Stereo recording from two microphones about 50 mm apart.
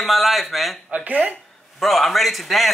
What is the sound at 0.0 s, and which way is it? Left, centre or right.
Speech, centre.